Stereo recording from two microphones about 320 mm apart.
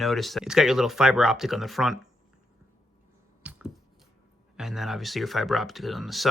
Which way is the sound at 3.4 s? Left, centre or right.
Centre.